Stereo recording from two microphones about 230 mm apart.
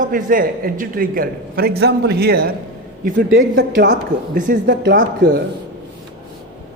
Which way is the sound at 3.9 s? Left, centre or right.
Right.